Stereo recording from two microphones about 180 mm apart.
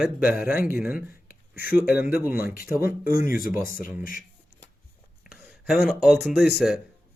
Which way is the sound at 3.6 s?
55° left (ahead or behind).